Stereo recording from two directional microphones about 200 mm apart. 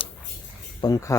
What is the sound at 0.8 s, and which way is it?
Speech, 15° left (ahead or behind).